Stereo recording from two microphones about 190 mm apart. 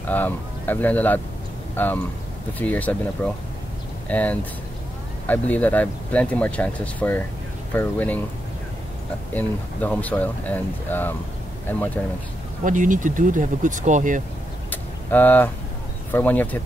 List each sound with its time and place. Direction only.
0.1 s speech: 10° left (ahead or behind)
9.3 s speech: 10° left (ahead or behind)
12.6 s speech: 45° right (ahead or behind)
14.7 s vehicle: 10° left (ahead or behind)
16.1 s speech: 10° left (ahead or behind)